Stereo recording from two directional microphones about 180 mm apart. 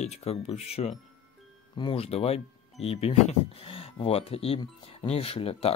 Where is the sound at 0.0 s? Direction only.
35° left (ahead or behind).